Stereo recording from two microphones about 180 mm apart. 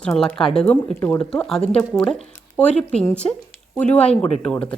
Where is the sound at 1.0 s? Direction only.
15° left (ahead or behind).